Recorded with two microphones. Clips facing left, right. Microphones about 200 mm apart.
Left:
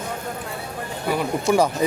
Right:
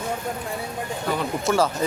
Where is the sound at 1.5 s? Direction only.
15° left (ahead or behind).